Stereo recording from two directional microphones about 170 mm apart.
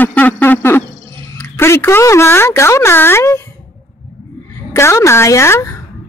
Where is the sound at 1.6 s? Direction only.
15° left (ahead or behind).